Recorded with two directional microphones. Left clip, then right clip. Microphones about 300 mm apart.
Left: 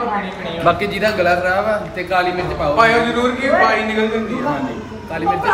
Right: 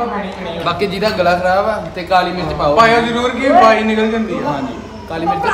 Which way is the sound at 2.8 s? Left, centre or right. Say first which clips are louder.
Right 2 dB; right.